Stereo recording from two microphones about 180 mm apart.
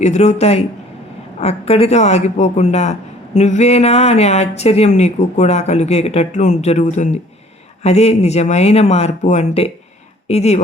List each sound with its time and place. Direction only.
0.0 s speech: 40° left (ahead or behind)